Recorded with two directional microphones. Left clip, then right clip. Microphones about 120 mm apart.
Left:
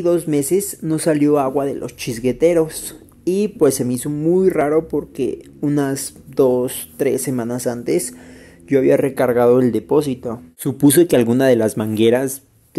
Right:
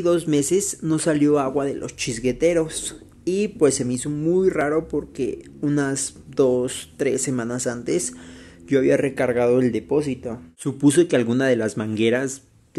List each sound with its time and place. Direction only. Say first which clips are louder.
0.0 s speech: left 3 dB; 15° left (ahead or behind); by 12.4 s 35° left (ahead or behind)